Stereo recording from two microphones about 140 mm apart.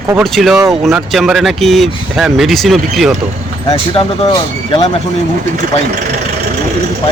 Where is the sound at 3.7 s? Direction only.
40° left (ahead or behind).